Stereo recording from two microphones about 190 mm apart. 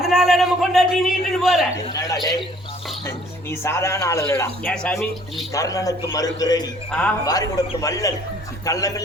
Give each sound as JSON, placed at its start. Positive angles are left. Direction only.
{"t": 0.0, "sound": "a man's voice", "side_deg": 0}
{"t": 1.9, "sound": "a man's voice", "side_deg": 20}
{"t": 3.5, "sound": "speech", "side_deg": 15}
{"t": 5.5, "sound": "a man's voice", "side_deg": 15}